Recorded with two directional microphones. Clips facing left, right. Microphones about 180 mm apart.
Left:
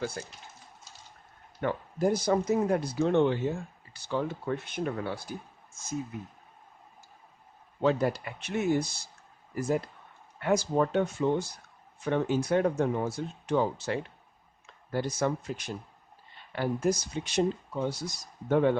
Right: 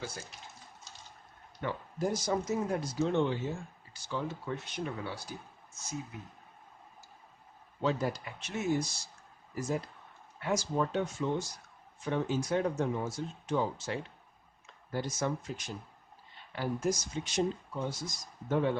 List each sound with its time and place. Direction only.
1.6 s speech: 60° left (ahead or behind)
7.8 s speech: 60° left (ahead or behind)